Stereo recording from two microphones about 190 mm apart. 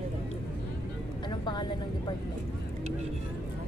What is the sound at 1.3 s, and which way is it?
Vehicle, 25° left (ahead or behind).